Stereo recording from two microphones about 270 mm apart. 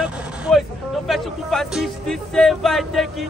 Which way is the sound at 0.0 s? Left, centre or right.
Centre.